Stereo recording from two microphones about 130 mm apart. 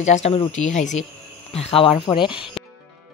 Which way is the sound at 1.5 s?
50° left (ahead or behind).